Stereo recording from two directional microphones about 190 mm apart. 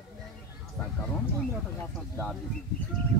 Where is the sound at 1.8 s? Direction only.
10° left (ahead or behind).